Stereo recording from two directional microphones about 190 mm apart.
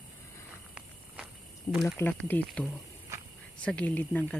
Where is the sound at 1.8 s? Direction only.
10° left (ahead or behind).